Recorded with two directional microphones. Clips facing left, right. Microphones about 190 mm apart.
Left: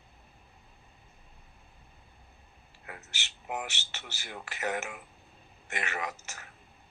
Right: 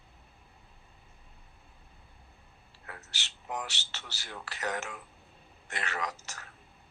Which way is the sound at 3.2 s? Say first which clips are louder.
Left 1 dB; 15° left (ahead or behind).